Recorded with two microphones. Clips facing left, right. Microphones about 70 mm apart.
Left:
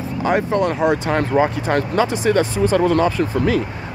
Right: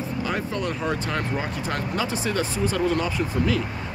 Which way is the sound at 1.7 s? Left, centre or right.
Left.